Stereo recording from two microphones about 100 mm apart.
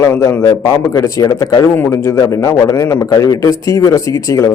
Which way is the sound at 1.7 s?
25° left (ahead or behind).